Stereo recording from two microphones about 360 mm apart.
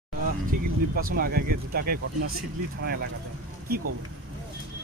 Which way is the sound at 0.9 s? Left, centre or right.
Right.